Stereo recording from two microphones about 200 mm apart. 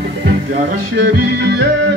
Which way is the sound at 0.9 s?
60° right (ahead or behind).